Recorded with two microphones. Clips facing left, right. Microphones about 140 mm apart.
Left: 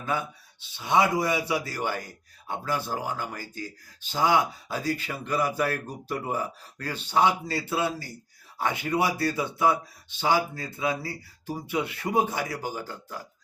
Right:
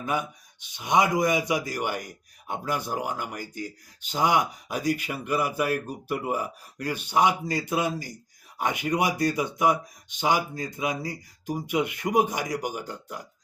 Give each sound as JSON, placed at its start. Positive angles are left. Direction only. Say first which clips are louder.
{"t": 0.0, "sound": "speech", "louder": "right 1 dB", "side_deg": -15}